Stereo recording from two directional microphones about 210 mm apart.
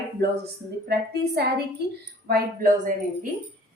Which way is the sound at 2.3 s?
40° right (ahead or behind).